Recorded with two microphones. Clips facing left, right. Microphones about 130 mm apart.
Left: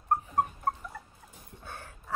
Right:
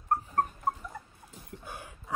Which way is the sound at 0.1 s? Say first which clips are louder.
Left 1 dB; 20° left (ahead or behind).